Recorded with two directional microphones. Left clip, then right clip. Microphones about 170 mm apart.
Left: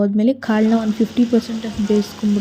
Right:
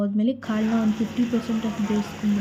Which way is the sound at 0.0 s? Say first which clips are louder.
Left 8 dB; 40° left (ahead or behind).